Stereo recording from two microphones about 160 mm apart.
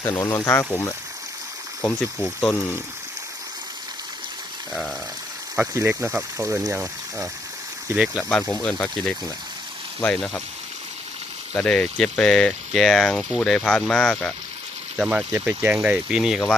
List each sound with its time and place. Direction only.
0.1 s speech: 15° left (ahead or behind)
5.7 s speech: 15° right (ahead or behind)
7.9 s speech: centre (ahead or behind)
11.5 s speech: 5° left (ahead or behind)